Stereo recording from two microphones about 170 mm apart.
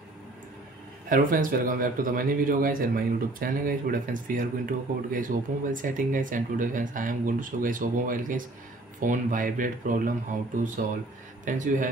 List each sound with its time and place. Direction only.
1.0 s speech: 55° right (ahead or behind)